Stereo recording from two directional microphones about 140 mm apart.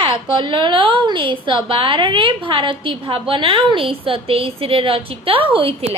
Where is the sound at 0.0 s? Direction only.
40° right (ahead or behind).